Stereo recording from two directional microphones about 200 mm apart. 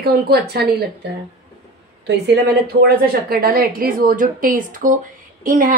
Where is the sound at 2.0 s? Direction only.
55° right (ahead or behind).